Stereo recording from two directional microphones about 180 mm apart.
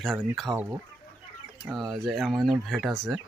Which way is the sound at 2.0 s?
Centre (ahead or behind).